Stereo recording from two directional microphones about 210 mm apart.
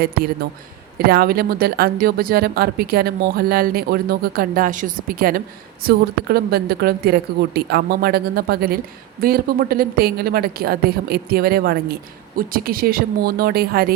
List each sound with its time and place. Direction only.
0.9 s speech: 45° right (ahead or behind)